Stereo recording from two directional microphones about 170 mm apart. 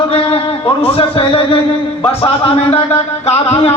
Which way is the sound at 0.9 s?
30° left (ahead or behind).